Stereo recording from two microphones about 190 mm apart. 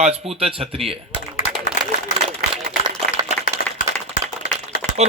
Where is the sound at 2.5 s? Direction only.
25° right (ahead or behind).